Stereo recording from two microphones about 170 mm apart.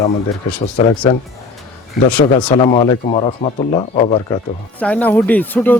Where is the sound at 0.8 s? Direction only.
30° left (ahead or behind).